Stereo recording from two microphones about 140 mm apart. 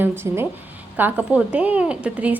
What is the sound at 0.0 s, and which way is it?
A woman's voice, 15° right (ahead or behind).